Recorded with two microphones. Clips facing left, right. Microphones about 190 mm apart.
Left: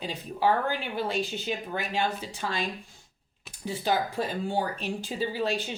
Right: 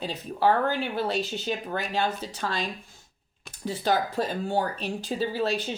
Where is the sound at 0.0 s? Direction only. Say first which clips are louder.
Right 2 dB; 15° left (ahead or behind).